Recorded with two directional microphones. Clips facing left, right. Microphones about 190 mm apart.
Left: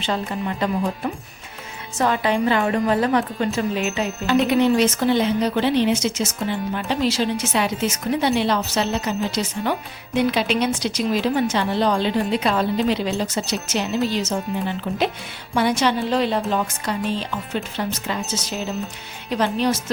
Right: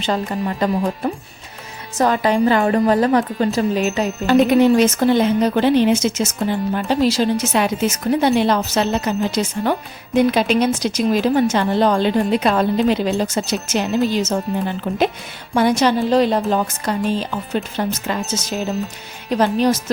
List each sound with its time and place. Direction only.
0.0 s a woman's voice: 40° right (ahead or behind)
15.5 s a woman's voice: 45° right (ahead or behind)